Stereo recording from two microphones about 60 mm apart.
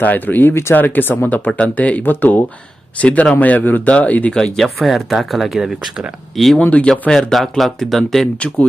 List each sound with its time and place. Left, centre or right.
0.0 s speech: left
1.5 s speech: left
3.0 s speech: left
4.5 s speech: centre
6.6 s speech: left
7.1 s speech: centre
8.4 s speech: left